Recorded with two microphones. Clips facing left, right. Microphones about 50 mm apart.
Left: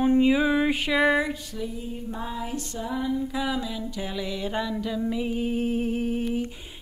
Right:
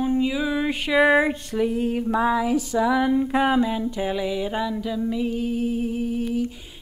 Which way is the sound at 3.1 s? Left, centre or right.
Right.